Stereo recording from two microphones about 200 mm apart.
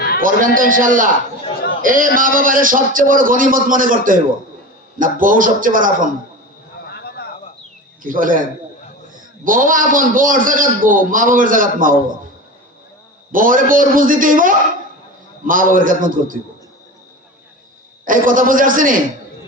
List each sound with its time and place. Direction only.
0.2 s a man's voice: 45° right (ahead or behind)
6.8 s a sound: 55° left (ahead or behind)
8.0 s a man's voice: 45° right (ahead or behind)
13.3 s a man's voice: 45° right (ahead or behind)
18.0 s a man's voice: 40° right (ahead or behind)